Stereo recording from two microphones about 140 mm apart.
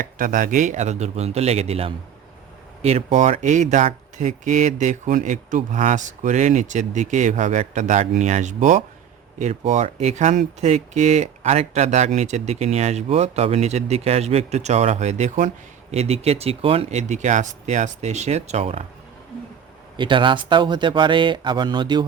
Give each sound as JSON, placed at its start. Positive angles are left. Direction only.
{"t": 0.0, "sound": "speech", "side_deg": -70}
{"t": 20.0, "sound": "speech", "side_deg": -35}